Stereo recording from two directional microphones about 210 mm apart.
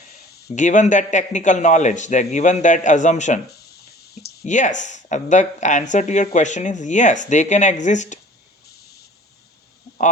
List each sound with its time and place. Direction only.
0.3 s speech: 45° left (ahead or behind)
3.7 s clicking: 50° left (ahead or behind)
4.4 s speech: 35° left (ahead or behind)